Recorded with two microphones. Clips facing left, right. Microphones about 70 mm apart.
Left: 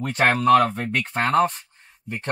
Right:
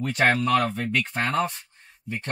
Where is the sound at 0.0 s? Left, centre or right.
Left.